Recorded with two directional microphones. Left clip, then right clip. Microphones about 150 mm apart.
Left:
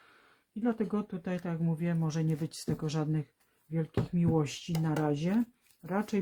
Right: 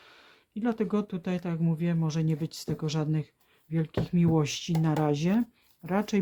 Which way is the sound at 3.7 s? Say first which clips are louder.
Right 3 dB; 35° right (ahead or behind).